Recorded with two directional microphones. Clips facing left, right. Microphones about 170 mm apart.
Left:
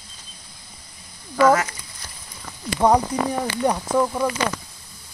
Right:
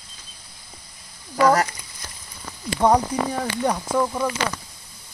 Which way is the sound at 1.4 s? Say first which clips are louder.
Left 1 dB; 35° right (ahead or behind).